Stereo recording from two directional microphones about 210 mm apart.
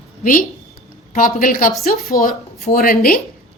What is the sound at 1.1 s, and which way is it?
A man's voice, 40° left (ahead or behind).